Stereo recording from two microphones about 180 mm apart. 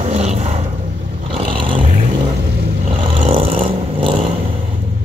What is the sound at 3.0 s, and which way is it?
Vehicle, 35° right (ahead or behind).